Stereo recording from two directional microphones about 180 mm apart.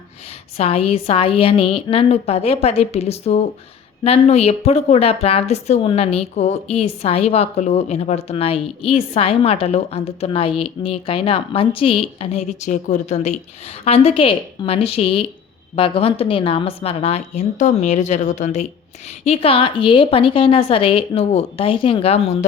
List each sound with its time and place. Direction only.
0.5 s a woman's voice: 35° left (ahead or behind)